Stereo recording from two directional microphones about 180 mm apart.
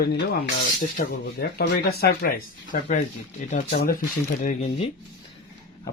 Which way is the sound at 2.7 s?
45° left (ahead or behind).